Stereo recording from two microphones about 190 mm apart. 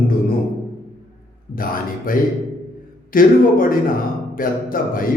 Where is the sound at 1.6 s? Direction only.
45° left (ahead or behind).